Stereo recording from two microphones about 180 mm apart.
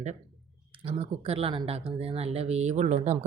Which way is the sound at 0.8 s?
35° right (ahead or behind).